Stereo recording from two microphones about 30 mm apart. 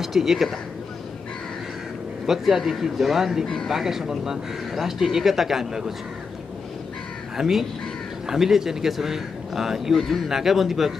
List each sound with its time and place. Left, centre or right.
0.0 s speech: centre
2.2 s speech: centre
4.7 s speech: centre
7.3 s speech: centre
9.9 s a man's voice: centre
10.2 s speech: centre